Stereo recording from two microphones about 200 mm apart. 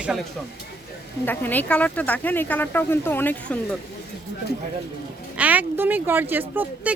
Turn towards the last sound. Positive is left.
turn(degrees=-10)  # may be behind; listen again after turning